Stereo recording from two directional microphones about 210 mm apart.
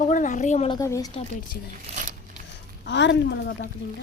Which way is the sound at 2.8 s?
55° left (ahead or behind).